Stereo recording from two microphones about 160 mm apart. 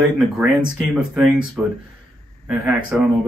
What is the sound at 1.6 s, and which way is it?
Speech, 5° right (ahead or behind).